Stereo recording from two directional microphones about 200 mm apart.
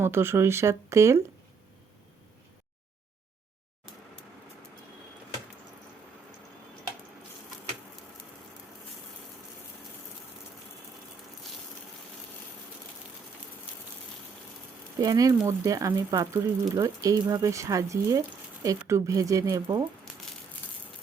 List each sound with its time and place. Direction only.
0.0 s speech: 10° right (ahead or behind)
14.9 s speech: 20° right (ahead or behind)